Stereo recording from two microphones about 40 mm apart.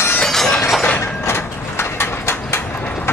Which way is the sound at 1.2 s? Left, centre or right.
Left.